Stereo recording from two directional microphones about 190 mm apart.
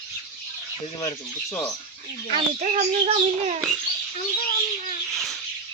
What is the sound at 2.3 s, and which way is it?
Speech, 35° right (ahead or behind).